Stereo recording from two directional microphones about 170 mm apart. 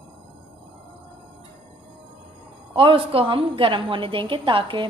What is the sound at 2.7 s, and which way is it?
A woman's voice, 30° right (ahead or behind).